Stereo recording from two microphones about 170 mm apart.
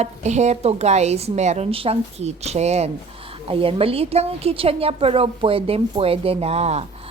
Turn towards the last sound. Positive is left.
turn(degrees=-40)  # may be behind; listen again after turning